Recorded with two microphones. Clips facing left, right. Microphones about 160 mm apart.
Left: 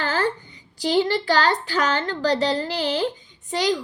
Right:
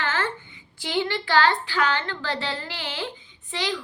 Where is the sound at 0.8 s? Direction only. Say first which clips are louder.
Left 6 dB; 40° left (ahead or behind).